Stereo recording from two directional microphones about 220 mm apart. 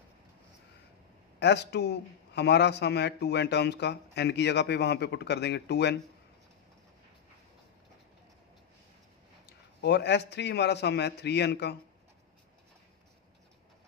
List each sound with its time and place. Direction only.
1.4 s a man's voice: 50° left (ahead or behind)
9.5 s a man's voice: 50° left (ahead or behind)